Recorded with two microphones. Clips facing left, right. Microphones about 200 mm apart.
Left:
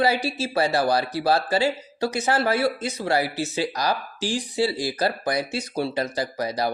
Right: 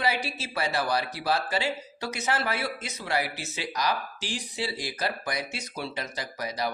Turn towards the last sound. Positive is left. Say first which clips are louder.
# left 7 dB
turn(degrees=35)  # may be behind; listen again after turning